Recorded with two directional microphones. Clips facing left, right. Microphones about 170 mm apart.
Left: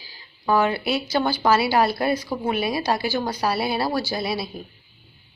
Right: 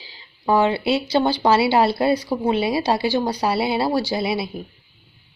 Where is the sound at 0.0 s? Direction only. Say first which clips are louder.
Right 3 dB; 25° right (ahead or behind).